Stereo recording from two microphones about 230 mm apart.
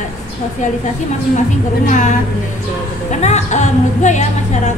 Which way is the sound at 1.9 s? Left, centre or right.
Left.